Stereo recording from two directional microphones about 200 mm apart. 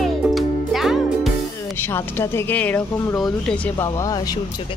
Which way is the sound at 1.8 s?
10° left (ahead or behind).